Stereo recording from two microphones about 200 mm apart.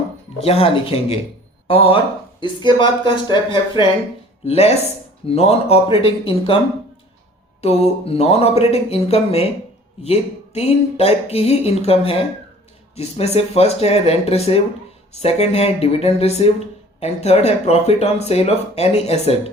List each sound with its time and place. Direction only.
0.3 s speech: 30° left (ahead or behind)
7.6 s speech: 30° left (ahead or behind)